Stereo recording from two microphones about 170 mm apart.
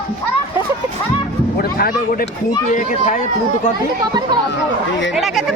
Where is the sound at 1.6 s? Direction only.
65° left (ahead or behind).